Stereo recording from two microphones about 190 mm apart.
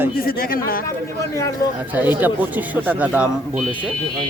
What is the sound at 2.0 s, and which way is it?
Speech, 10° right (ahead or behind).